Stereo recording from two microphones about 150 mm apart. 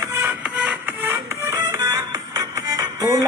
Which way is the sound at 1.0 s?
15° right (ahead or behind).